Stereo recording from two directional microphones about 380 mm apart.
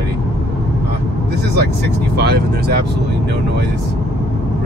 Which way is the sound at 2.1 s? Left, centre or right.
Right.